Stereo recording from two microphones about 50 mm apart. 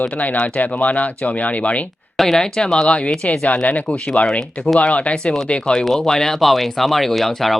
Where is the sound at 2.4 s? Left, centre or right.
Centre.